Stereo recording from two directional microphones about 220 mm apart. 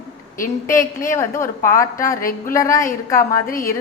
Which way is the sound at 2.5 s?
15° left (ahead or behind).